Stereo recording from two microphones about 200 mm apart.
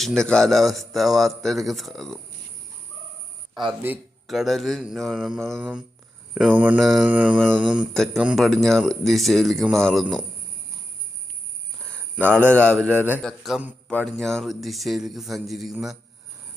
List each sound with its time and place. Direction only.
0.2 s speech: 5° left (ahead or behind)
3.5 s speech: 20° right (ahead or behind)
3.8 s speech: centre (ahead or behind)
12.3 s speech: 5° left (ahead or behind)